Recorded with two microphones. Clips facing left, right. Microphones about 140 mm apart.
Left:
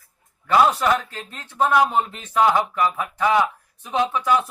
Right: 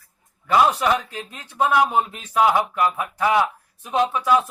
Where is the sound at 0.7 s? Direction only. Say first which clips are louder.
Even; 10° right (ahead or behind).